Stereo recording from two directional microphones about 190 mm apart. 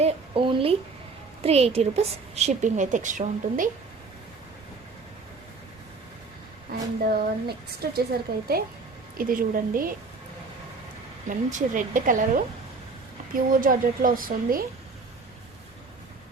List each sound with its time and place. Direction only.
0.0 s a sound: 25° right (ahead or behind)
1.4 s a woman's voice: 35° right (ahead or behind)
6.7 s a sound: 55° right (ahead or behind)
7.2 s a woman's voice: 55° right (ahead or behind)
11.3 s a woman's voice: 45° right (ahead or behind)
13.3 s a woman's voice: 45° right (ahead or behind)